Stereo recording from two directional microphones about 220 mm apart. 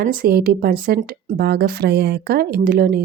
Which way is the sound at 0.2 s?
40° right (ahead or behind).